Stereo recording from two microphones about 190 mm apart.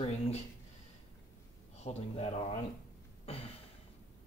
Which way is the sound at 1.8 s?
35° left (ahead or behind).